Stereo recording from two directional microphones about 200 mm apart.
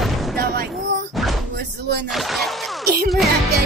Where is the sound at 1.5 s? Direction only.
55° right (ahead or behind).